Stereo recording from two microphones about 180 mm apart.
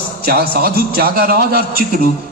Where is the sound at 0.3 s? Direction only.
60° right (ahead or behind).